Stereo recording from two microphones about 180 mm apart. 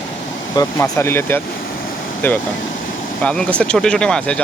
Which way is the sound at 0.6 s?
15° left (ahead or behind).